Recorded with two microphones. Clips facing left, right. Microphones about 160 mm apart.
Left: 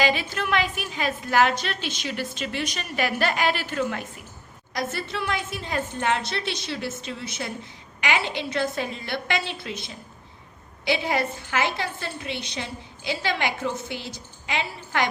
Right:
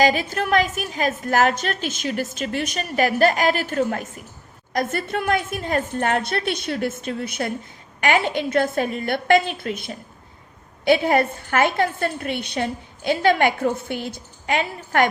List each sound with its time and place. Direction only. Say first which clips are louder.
0.0 s a woman's voice: right 5 dB; 45° right (ahead or behind)